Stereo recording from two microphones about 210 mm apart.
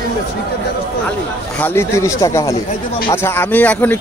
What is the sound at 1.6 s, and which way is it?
A man's voice, 10° left (ahead or behind).